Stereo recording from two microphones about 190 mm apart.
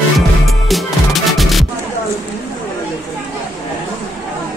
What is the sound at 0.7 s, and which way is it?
Music, centre (ahead or behind).